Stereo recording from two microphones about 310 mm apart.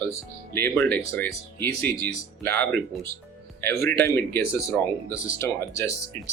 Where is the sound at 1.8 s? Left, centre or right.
Right.